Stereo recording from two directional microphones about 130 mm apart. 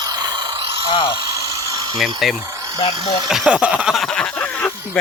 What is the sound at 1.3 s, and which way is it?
Electric toothbrush, 25° right (ahead or behind).